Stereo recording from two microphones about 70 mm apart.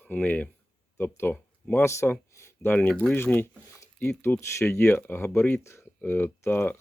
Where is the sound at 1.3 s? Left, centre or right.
Left.